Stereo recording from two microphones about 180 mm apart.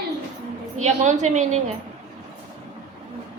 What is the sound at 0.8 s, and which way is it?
Speech, 40° right (ahead or behind).